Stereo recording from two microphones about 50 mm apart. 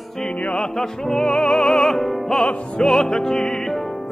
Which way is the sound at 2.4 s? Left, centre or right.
Left.